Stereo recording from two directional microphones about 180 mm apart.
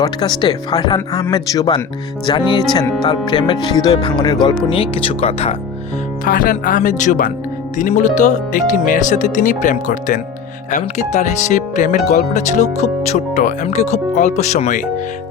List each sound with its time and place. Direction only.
0.0 s speech: 25° left (ahead or behind)
6.2 s speech: 50° left (ahead or behind)